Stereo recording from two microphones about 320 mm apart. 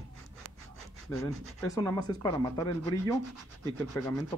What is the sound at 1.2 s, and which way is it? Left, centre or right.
Speech, centre.